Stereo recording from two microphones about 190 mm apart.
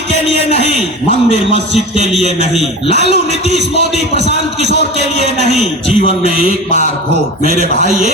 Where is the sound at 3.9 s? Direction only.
35° right (ahead or behind).